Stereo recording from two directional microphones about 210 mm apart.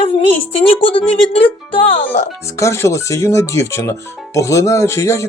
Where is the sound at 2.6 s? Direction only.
15° left (ahead or behind).